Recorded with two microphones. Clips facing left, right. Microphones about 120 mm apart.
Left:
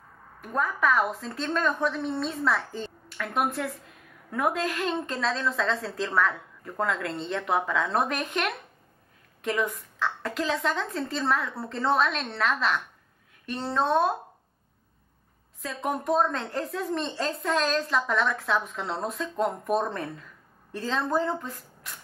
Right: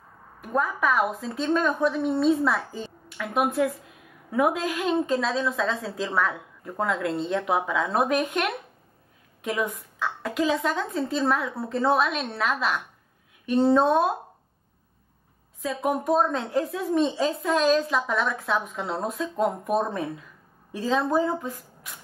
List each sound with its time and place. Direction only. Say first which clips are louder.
0.4 s a woman's voice: right 2 dB; 5° right (ahead or behind)
15.6 s a woman's voice: right 4 dB; 5° right (ahead or behind)